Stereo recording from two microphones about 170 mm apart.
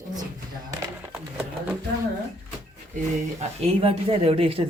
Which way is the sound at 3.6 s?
35° right (ahead or behind).